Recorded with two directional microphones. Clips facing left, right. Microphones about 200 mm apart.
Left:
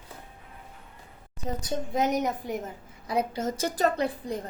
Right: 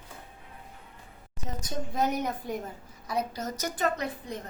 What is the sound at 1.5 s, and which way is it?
Speech, 30° left (ahead or behind).